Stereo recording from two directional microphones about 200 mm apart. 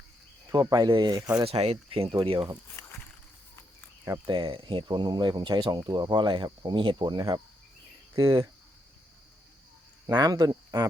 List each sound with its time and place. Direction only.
0.5 s speech: 20° right (ahead or behind)
2.8 s a sound: 15° left (ahead or behind)
4.0 s speech: 20° right (ahead or behind)
10.1 s cricket: 20° right (ahead or behind)